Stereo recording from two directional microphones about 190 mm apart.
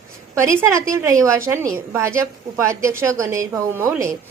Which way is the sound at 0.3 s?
15° right (ahead or behind).